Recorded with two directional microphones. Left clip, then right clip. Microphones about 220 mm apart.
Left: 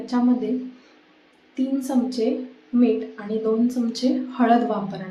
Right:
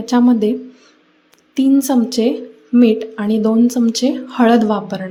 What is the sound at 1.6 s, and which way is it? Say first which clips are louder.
A woman's voice: right 10 dB; 45° right (ahead or behind).